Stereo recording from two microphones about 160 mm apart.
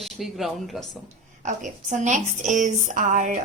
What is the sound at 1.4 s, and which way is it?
A woman's voice, 50° right (ahead or behind).